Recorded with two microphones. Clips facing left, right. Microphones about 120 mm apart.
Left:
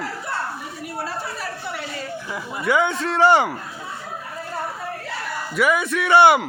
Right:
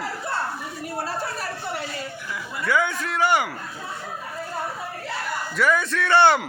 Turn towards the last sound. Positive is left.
turn(degrees=10)  # may be behind; listen again after turning